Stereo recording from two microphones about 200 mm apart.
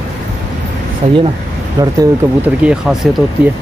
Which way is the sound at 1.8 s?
15° right (ahead or behind).